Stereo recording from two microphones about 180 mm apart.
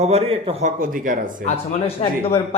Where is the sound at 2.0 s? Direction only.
35° left (ahead or behind).